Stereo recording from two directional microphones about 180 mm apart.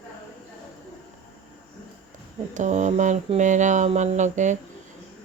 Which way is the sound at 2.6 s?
45° right (ahead or behind).